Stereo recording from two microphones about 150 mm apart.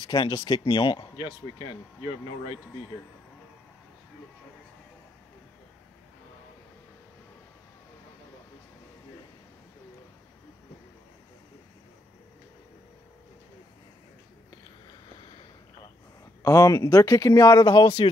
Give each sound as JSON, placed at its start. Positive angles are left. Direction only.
{"t": 0.0, "sound": "speech", "side_deg": 30}
{"t": 16.4, "sound": "speech", "side_deg": 20}